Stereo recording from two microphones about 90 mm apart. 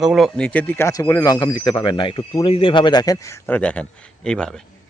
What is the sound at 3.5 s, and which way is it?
Speech, 15° left (ahead or behind).